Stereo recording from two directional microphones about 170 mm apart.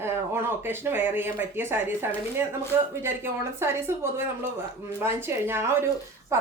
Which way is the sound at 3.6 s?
15° right (ahead or behind).